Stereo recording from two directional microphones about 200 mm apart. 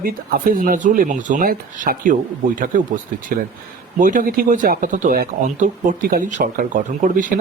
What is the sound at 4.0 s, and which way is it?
Speech, 40° right (ahead or behind).